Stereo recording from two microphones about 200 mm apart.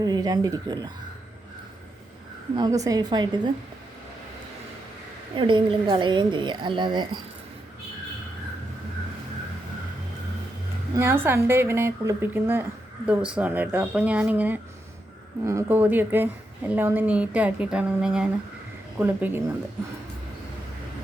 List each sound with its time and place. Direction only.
0.0 s a woman's voice: 20° right (ahead or behind)
2.6 s a woman's voice: 20° right (ahead or behind)
5.4 s a woman's voice: 25° right (ahead or behind)
10.9 s a woman's voice: 10° right (ahead or behind)